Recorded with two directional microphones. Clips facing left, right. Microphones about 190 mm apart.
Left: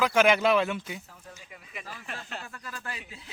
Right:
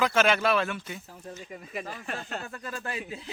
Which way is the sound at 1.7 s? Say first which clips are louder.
Right 5 dB; 40° right (ahead or behind).